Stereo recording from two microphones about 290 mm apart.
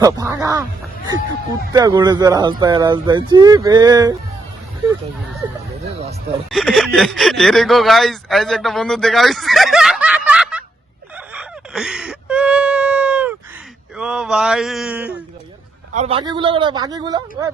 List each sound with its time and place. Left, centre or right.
0.0 s speech: centre
1.7 s speech: centre
5.4 s speech: centre
5.8 s a sound: right
6.5 s speech: centre
11.3 s a sound: centre
14.0 s speech: centre
16.0 s speech: centre